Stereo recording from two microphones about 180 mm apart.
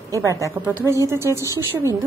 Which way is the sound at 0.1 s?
15° right (ahead or behind).